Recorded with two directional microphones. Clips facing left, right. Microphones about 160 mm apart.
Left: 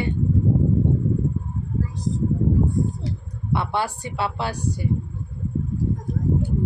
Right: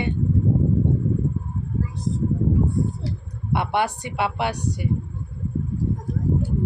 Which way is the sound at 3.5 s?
15° right (ahead or behind).